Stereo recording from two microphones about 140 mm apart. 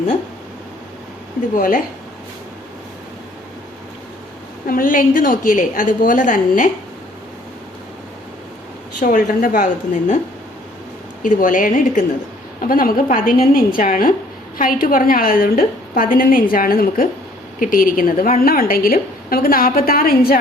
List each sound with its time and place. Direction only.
1.5 s a woman's voice: 75° left (ahead or behind)
4.6 s a woman's voice: 85° left; by 6.7 s 70° left (ahead or behind)
9.0 s a woman's voice: 70° left (ahead or behind)
11.2 s a woman's voice: 70° left (ahead or behind)
12.6 s a woman's voice: 90° left